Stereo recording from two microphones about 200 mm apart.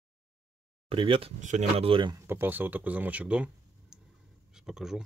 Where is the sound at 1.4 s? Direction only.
35° right (ahead or behind).